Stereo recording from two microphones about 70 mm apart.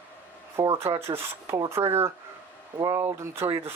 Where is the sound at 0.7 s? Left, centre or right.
Right.